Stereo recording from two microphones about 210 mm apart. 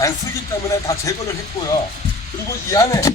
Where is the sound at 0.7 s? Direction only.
15° left (ahead or behind).